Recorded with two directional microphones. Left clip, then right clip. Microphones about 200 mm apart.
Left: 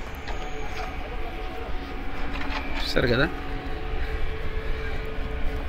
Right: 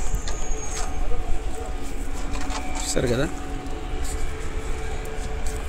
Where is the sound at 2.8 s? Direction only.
20° right (ahead or behind).